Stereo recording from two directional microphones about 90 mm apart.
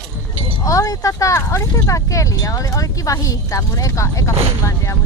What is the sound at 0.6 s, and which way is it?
Speech, 40° left (ahead or behind).